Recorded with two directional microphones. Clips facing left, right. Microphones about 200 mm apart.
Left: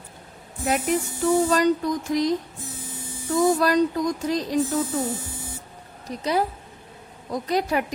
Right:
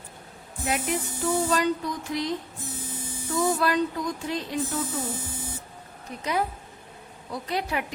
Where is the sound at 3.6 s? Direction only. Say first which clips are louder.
Left 5 dB; 40° left (ahead or behind).